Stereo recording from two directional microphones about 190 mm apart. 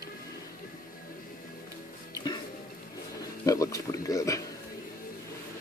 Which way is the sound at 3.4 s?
15° left (ahead or behind).